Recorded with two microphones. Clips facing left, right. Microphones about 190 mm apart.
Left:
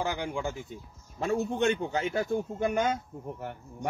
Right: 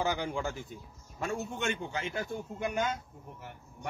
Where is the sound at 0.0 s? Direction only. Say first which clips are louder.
Even; 10° left (ahead or behind).